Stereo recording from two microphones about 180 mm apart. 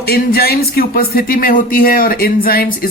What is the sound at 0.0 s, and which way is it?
A man's voice, 60° left (ahead or behind).